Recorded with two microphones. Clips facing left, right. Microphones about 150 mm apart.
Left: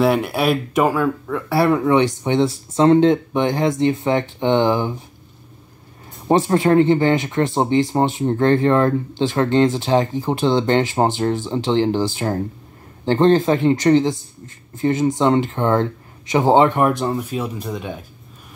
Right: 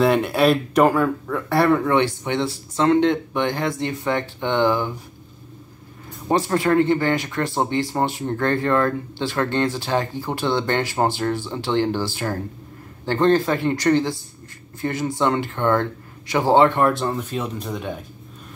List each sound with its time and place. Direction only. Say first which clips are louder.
0.0 s speech: even; 5° left (ahead or behind); by 5.0 s 25° left (ahead or behind)
6.2 s speech: left 4 dB; 25° left (ahead or behind); by 18.0 s centre (ahead or behind)